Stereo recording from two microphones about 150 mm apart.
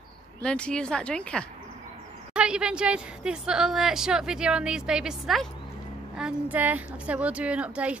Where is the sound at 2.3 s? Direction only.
5° right (ahead or behind).